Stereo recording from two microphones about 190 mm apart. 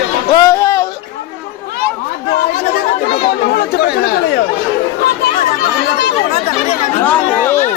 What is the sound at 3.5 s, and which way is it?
Speech, 55° left (ahead or behind).